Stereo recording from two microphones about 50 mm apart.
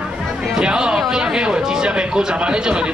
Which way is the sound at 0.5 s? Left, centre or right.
Centre.